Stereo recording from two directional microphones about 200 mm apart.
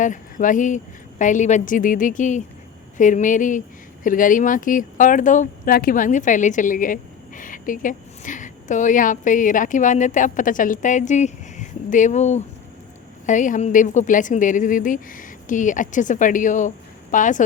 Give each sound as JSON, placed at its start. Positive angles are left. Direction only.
{"t": 0.0, "sound": "speech", "side_deg": 40}